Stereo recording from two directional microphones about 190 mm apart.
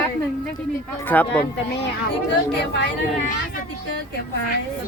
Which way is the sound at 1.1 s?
10° left (ahead or behind).